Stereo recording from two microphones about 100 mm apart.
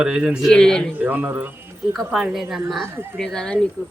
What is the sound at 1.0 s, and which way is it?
Speech, 15° right (ahead or behind).